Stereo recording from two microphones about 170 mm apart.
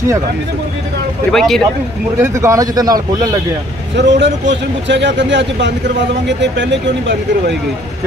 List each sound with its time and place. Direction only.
1.3 s speech: centre (ahead or behind)
2.3 s a man's voice: 15° right (ahead or behind)
3.9 s speech: 90° right